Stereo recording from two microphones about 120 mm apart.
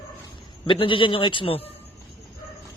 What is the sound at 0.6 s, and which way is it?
A man's voice, 45° left (ahead or behind).